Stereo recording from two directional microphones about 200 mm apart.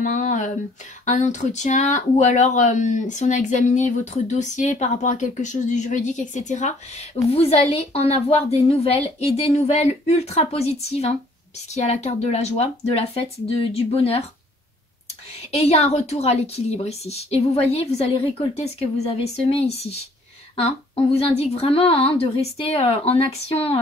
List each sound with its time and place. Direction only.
0.0 s a sound: 40° left (ahead or behind)
1.0 s speech: 35° left (ahead or behind)
15.5 s a woman's voice: 30° left (ahead or behind)